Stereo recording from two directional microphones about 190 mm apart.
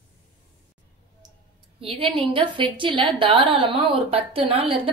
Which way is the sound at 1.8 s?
30° right (ahead or behind).